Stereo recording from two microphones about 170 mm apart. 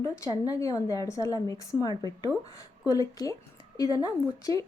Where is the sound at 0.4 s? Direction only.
20° left (ahead or behind).